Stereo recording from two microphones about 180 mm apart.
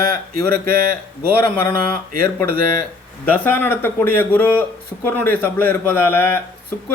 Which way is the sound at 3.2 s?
10° left (ahead or behind).